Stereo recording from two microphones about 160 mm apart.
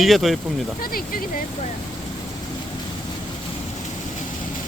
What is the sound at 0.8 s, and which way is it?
Speech, 65° left (ahead or behind).